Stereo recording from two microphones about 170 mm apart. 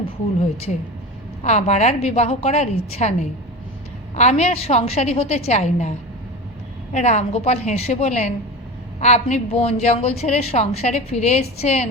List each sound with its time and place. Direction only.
1.4 s a woman's voice: 40° left (ahead or behind)
6.9 s a woman's voice: 40° left (ahead or behind)